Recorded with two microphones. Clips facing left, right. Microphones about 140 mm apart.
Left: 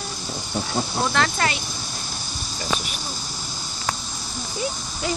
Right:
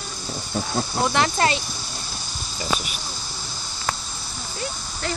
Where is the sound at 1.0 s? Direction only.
15° right (ahead or behind).